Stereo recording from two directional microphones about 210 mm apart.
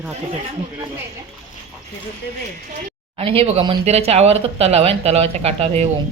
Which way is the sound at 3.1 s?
30° right (ahead or behind).